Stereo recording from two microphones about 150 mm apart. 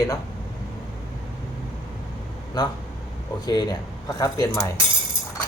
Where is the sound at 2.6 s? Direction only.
25° left (ahead or behind).